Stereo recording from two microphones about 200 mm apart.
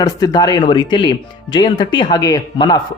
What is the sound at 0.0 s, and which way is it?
Speech, 20° left (ahead or behind).